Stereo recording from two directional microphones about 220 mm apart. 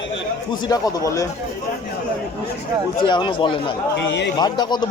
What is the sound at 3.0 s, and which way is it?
Speech, 20° left (ahead or behind).